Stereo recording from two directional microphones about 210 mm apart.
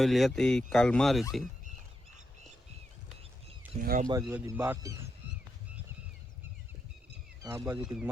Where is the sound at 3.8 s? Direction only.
40° right (ahead or behind).